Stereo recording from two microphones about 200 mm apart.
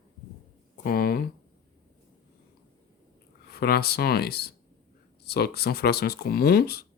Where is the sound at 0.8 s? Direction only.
50° left (ahead or behind).